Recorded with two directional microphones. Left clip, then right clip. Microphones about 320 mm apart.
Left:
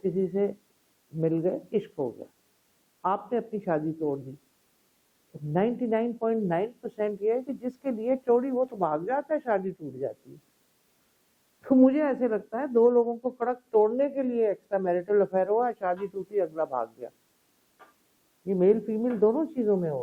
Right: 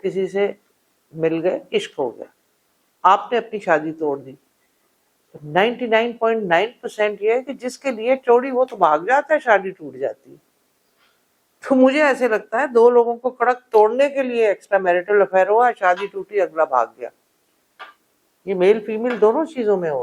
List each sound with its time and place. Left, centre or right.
0.0 s speech: centre
3.0 s speech: centre
5.5 s speech: centre
11.6 s speech: centre
13.5 s speech: centre
18.4 s speech: centre